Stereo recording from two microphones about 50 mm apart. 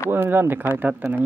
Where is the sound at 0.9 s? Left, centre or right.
Right.